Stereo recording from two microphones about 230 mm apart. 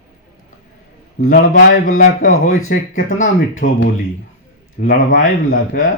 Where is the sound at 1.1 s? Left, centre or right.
Left.